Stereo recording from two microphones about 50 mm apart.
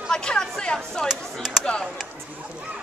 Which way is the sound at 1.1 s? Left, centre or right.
Centre.